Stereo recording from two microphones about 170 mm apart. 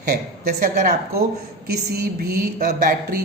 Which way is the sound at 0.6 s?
50° right (ahead or behind).